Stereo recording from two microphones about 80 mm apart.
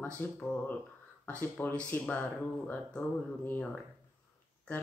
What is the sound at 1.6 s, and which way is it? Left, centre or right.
Speech, left.